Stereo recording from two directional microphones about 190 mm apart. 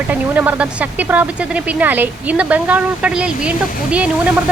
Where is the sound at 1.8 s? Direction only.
10° right (ahead or behind).